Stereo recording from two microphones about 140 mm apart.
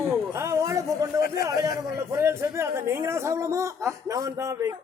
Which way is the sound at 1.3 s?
25° right (ahead or behind).